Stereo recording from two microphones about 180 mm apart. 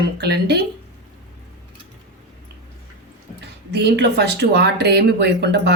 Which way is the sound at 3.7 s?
70° right (ahead or behind).